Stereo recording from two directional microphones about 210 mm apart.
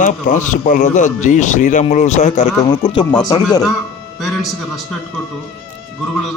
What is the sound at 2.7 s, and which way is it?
Speech, 20° left (ahead or behind).